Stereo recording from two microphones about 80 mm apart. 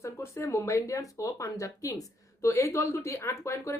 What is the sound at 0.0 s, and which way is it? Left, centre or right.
Speech, left.